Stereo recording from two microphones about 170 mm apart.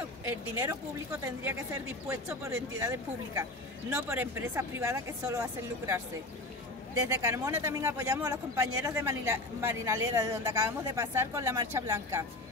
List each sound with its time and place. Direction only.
0.2 s speech: 15° right (ahead or behind)